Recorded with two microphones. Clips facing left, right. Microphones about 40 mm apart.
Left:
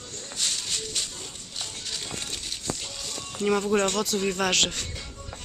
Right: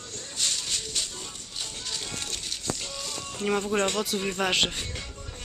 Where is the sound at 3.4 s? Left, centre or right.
Right.